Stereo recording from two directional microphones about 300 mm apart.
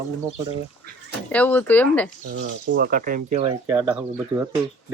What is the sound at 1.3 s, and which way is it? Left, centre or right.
Speech, centre.